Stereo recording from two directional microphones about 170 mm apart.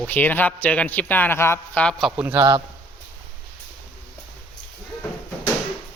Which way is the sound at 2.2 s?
10° right (ahead or behind).